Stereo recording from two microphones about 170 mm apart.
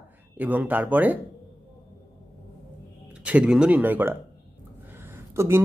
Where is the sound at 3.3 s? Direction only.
5° right (ahead or behind).